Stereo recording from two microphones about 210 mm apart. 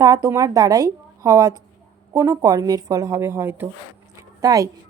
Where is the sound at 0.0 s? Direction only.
15° right (ahead or behind).